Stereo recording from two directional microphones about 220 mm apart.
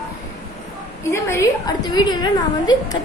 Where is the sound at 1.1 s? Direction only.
10° left (ahead or behind).